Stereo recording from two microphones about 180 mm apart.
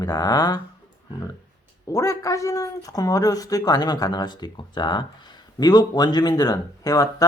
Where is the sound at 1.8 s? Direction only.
20° left (ahead or behind).